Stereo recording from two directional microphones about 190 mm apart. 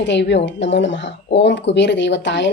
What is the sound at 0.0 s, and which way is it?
Speech, 65° left (ahead or behind).